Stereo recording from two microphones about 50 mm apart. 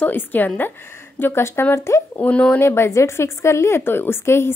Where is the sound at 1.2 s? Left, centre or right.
Left.